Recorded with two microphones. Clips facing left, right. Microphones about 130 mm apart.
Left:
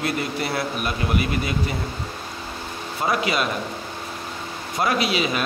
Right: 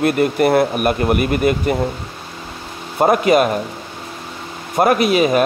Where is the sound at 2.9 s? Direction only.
55° right (ahead or behind).